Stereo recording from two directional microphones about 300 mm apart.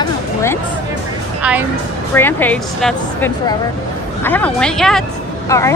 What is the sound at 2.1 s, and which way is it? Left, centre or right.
A woman's voice, centre.